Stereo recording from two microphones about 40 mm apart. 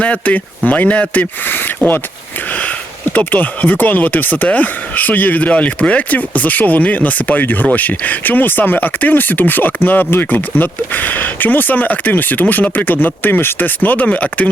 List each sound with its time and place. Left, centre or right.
0.0 s speech: left
1.5 s speech: left
3.2 s speech: left
10.3 s speech: left